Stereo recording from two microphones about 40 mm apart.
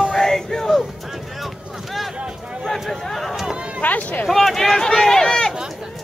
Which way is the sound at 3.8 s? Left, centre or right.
Left.